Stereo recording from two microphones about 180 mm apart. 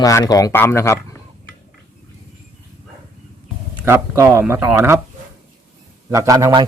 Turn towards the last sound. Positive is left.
turn(degrees=-20)  # may be behind; listen again after turning